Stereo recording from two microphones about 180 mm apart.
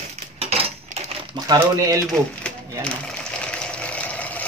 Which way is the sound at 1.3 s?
20° right (ahead or behind).